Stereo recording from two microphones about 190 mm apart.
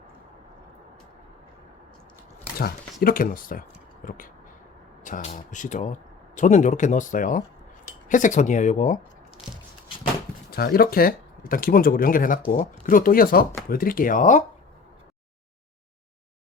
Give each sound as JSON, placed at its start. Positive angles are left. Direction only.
{"t": 2.6, "sound": "speech", "side_deg": 50}
{"t": 10.5, "sound": "speech", "side_deg": 55}